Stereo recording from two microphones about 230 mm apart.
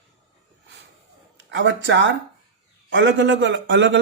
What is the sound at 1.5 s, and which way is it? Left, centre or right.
A man's voice, right.